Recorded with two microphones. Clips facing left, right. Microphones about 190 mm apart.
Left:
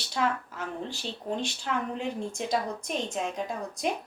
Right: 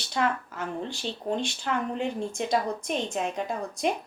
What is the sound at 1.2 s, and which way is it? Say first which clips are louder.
Speech: right 3 dB; 50° right (ahead or behind).